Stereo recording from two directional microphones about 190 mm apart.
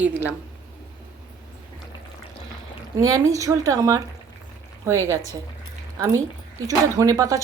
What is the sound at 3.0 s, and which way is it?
A woman's voice, 15° right (ahead or behind).